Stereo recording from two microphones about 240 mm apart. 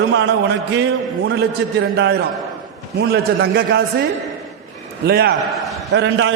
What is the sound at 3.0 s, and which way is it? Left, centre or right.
Speech, right.